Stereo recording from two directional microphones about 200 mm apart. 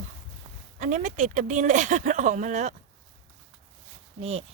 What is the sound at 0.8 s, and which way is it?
Speech, 35° right (ahead or behind).